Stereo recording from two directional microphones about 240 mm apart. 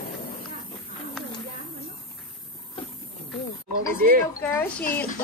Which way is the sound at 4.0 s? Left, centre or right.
Right.